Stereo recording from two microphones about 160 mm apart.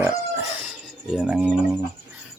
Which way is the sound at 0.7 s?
5° right (ahead or behind).